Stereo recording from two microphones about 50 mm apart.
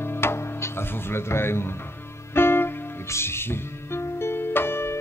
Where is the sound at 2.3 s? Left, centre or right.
Left.